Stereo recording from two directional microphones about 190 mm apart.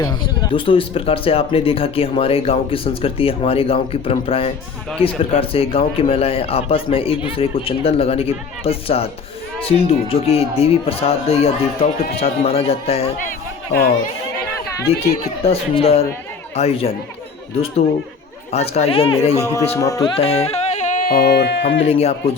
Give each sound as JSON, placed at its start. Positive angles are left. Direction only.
{"t": 0.0, "sound": "a man's voice", "side_deg": 25}
{"t": 14.8, "sound": "a man's voice", "side_deg": 30}
{"t": 18.5, "sound": "a man's voice", "side_deg": 35}
{"t": 19.4, "sound": "a man's voice", "side_deg": 15}
{"t": 20.1, "sound": "speech", "side_deg": 30}
{"t": 21.8, "sound": "a man's voice", "side_deg": 30}